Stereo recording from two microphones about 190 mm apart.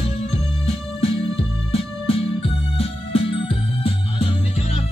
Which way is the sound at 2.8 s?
30° left (ahead or behind).